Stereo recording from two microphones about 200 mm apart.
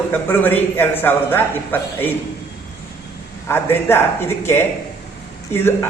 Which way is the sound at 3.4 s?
10° left (ahead or behind).